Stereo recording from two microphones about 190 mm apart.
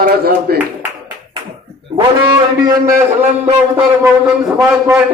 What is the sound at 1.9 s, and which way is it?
A man's voice, 20° right (ahead or behind).